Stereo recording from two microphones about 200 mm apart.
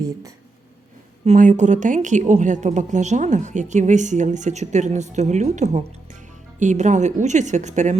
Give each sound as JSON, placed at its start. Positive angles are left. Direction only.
{"t": 1.2, "sound": "a woman's voice", "side_deg": -35}